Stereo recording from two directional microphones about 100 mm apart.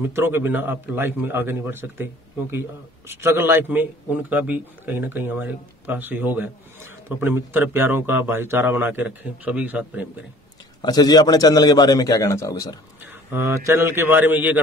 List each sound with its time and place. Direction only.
0.0 s a man's voice: 25° right (ahead or behind)
3.1 s a man's voice: 25° right (ahead or behind)
10.8 s a man's voice: 45° left (ahead or behind)
13.3 s a man's voice: 25° right (ahead or behind)